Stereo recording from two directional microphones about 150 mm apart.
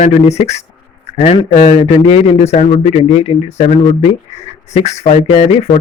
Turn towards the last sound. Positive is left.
turn(degrees=45)  # may be behind; listen again after turning